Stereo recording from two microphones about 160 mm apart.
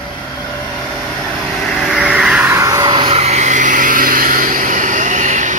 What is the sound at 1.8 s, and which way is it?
Vehicle, centre (ahead or behind).